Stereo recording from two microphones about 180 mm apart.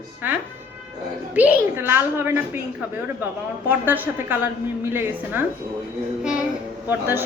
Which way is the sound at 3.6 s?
10° right (ahead or behind).